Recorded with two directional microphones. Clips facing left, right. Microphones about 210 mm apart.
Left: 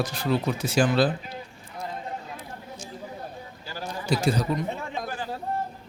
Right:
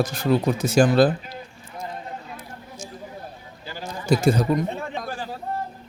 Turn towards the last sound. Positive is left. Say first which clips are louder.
# right 5 dB
turn(degrees=-50)  # may be behind; listen again after turning